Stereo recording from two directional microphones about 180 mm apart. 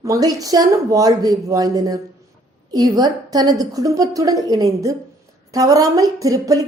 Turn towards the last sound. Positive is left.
turn(degrees=-20)  # may be behind; listen again after turning